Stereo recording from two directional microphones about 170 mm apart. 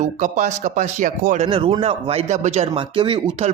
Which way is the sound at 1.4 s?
30° right (ahead or behind).